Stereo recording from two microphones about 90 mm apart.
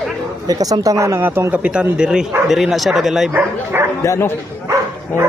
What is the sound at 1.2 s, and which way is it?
Speech, 20° right (ahead or behind).